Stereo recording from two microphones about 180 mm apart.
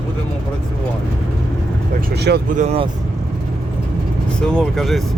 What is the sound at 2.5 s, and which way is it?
Speech, 35° right (ahead or behind).